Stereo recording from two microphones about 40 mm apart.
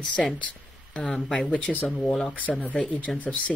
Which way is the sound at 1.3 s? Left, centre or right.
Left.